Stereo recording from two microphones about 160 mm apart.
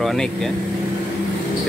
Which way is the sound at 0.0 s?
Centre (ahead or behind).